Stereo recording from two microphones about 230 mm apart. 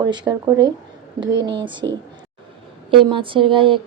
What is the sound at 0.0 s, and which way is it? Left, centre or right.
Speech, centre.